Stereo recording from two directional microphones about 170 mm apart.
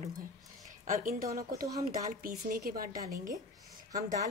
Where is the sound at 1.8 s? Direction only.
55° right (ahead or behind).